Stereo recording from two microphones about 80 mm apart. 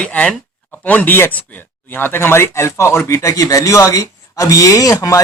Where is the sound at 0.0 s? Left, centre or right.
Centre.